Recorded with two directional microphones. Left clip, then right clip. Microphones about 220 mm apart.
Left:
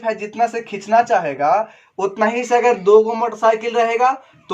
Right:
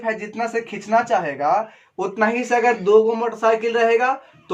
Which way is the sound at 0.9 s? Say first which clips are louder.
Left 4 dB; 35° left (ahead or behind).